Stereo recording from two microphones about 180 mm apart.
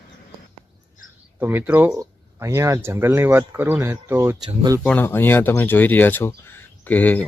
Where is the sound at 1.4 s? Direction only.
10° right (ahead or behind).